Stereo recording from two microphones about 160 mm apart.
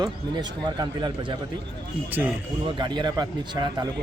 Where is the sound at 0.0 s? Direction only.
25° right (ahead or behind).